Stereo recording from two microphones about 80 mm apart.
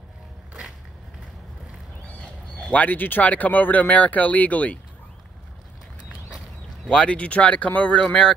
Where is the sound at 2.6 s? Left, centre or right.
Centre.